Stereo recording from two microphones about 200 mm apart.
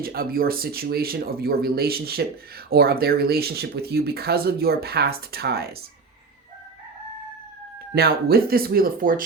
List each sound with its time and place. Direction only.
0.0 s speech: 50° right (ahead or behind)
7.9 s speech: 50° right (ahead or behind)